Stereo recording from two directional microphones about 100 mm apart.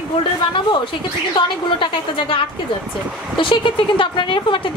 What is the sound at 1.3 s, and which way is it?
A woman's voice, 55° left (ahead or behind).